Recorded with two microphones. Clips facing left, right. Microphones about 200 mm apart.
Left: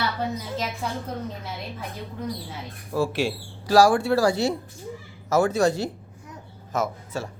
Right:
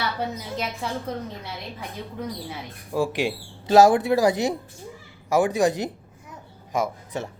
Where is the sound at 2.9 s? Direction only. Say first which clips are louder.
Even; 15° right (ahead or behind).